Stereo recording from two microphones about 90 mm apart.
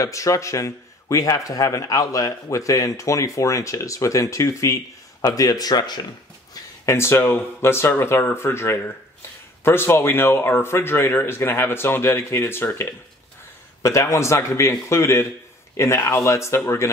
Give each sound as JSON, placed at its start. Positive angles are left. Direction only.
{"t": 0.0, "sound": "speech", "side_deg": 40}
{"t": 6.9, "sound": "speech", "side_deg": 30}
{"t": 13.8, "sound": "speech", "side_deg": 35}